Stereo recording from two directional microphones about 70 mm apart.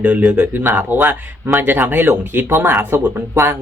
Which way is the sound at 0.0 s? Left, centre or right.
Centre.